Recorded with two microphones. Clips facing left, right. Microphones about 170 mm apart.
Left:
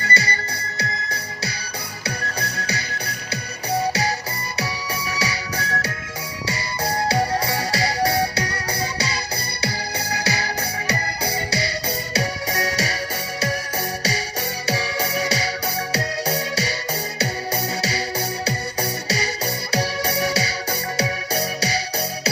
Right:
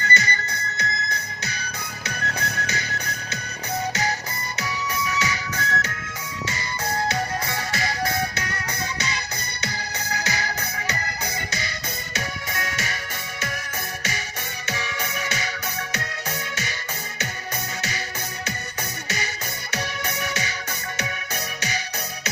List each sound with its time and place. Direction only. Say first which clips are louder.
0.0 s music: left 1 dB; 35° left (ahead or behind)
14.7 s music: left 6 dB; 35° left (ahead or behind)